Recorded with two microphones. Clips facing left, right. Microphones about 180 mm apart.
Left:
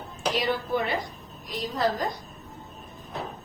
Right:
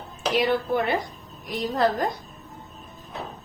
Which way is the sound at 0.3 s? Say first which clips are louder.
Right 5 dB; 55° right (ahead or behind).